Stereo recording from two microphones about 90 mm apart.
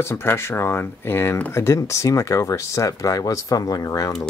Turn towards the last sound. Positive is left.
turn(degrees=40)  # may be behind; listen again after turning